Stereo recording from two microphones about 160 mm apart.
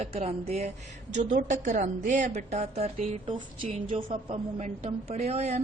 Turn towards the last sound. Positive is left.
turn(degrees=-40)  # may be behind; listen again after turning